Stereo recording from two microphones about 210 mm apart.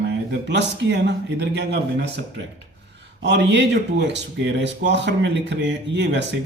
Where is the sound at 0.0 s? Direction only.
55° right (ahead or behind).